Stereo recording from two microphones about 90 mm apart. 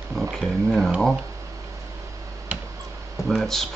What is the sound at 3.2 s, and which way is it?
Speech, 5° left (ahead or behind).